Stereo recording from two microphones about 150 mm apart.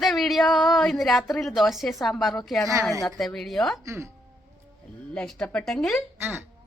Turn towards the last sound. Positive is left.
turn(degrees=-15)  # may be behind; listen again after turning